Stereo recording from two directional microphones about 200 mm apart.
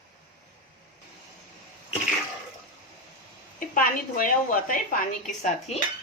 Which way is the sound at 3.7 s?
45° left (ahead or behind).